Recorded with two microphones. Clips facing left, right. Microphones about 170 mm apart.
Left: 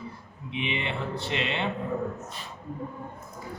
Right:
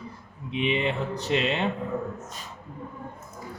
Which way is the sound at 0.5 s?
40° right (ahead or behind).